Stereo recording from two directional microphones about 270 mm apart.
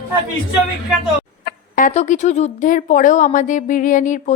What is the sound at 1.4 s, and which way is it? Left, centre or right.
Speech, left.